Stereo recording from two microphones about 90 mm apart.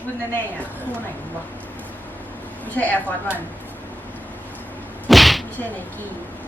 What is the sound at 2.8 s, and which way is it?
Speech, 15° left (ahead or behind).